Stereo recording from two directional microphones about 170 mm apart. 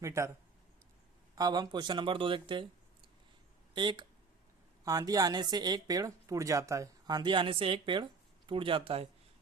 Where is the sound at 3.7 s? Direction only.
25° right (ahead or behind).